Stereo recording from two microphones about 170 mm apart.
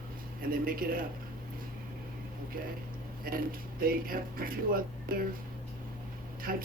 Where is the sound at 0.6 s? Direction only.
55° right (ahead or behind).